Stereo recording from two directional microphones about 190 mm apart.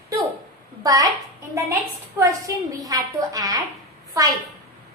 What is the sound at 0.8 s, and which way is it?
Speech, 20° right (ahead or behind).